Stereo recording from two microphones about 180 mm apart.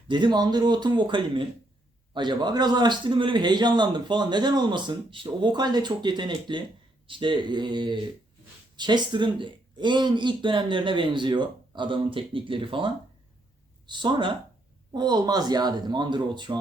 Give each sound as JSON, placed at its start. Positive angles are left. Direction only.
{"t": 0.1, "sound": "a man's voice", "side_deg": -25}